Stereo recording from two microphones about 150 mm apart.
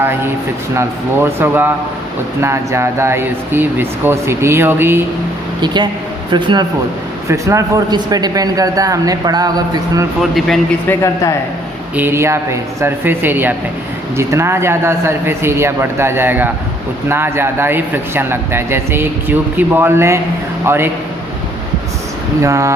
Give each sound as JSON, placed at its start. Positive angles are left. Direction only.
{"t": 0.0, "sound": "speech", "side_deg": -15}
{"t": 5.6, "sound": "a man's voice", "side_deg": -30}
{"t": 10.8, "sound": "a woman's voice", "side_deg": 20}
{"t": 11.9, "sound": "speech", "side_deg": -15}
{"t": 22.4, "sound": "speech", "side_deg": -20}